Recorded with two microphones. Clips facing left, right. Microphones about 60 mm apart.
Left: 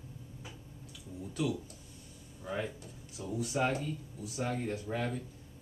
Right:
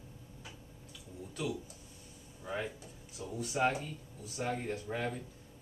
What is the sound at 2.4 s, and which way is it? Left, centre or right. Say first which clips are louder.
Speech: left 1 dB; centre.